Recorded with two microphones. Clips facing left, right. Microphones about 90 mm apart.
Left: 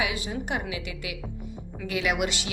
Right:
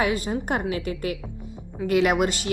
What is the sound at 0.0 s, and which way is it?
A woman's voice, 45° right (ahead or behind).